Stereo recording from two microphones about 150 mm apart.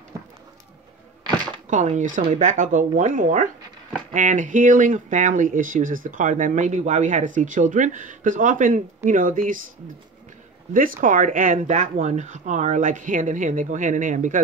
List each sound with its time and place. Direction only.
1.7 s speech: 55° right (ahead or behind)
10.7 s speech: 65° right (ahead or behind)